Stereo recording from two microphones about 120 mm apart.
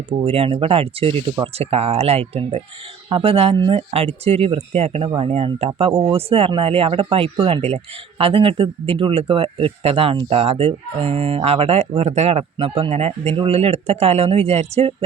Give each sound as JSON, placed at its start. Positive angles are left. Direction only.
{"t": 0.3, "sound": "speech", "side_deg": -55}
{"t": 13.3, "sound": "speech", "side_deg": -50}